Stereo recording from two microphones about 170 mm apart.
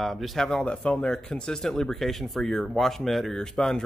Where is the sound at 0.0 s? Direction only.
Centre (ahead or behind).